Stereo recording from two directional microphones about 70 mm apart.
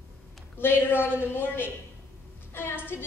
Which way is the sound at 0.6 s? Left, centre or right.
Left.